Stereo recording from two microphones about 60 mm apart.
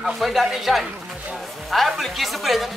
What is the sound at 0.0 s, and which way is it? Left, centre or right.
Speech, centre.